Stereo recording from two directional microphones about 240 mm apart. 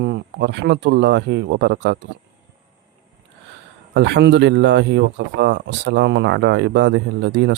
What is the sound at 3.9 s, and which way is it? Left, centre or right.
Speech, right.